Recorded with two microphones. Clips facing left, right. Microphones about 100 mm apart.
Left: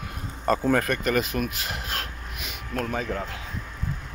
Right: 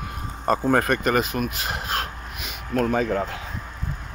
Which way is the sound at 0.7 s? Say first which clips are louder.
Right 3 dB; 40° right (ahead or behind).